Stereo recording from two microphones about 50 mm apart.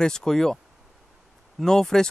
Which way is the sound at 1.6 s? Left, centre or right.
Centre.